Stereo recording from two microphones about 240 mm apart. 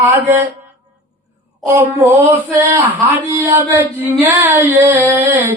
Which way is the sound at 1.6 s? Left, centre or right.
Centre.